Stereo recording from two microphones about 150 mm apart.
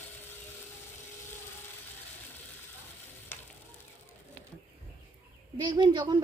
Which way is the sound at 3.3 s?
15° left (ahead or behind).